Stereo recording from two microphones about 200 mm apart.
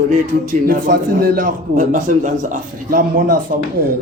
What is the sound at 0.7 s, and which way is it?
A man's voice, 45° right (ahead or behind).